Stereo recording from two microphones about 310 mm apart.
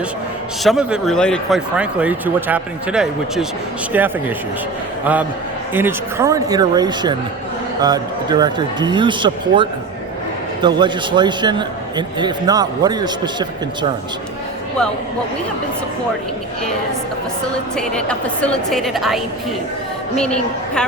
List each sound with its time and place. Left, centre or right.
0.6 s speech: centre
5.7 s a man's voice: centre
17.7 s speech: centre